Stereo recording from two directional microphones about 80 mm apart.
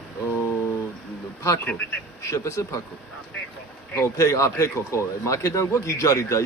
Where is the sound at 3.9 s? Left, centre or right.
Left.